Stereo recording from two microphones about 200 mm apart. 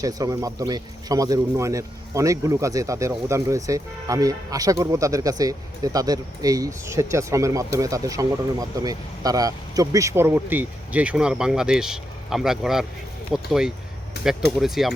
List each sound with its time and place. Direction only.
0.0 s speech: 20° right (ahead or behind); by 14.9 s centre (ahead or behind)